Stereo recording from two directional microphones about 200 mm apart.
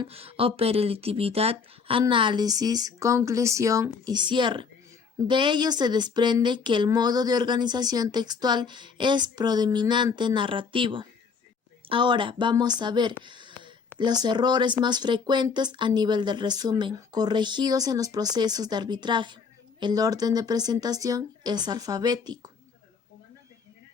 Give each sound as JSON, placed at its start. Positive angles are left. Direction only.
{"t": 0.0, "sound": "a woman's voice", "side_deg": -30}